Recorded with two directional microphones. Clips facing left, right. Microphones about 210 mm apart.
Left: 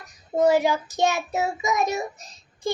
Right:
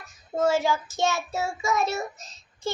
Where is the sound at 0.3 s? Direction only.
20° left (ahead or behind).